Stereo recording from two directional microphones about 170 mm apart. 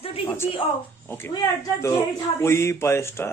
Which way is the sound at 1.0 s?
15° left (ahead or behind).